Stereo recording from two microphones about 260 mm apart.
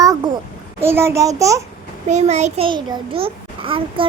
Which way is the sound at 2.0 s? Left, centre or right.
Right.